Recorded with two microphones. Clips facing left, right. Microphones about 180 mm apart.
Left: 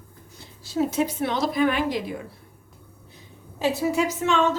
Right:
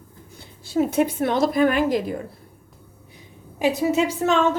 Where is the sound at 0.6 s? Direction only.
55° right (ahead or behind).